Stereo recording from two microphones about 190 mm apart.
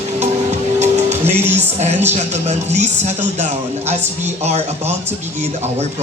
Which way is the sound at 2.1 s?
35° right (ahead or behind).